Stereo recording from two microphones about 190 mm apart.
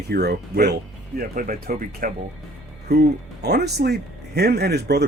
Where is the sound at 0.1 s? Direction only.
55° right (ahead or behind).